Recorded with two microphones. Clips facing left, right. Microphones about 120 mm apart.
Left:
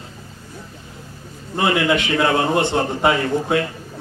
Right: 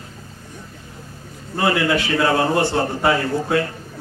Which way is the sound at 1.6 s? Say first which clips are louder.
Left 1 dB; 20° left (ahead or behind).